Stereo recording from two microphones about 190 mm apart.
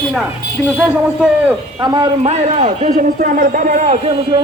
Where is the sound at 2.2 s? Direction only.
35° right (ahead or behind).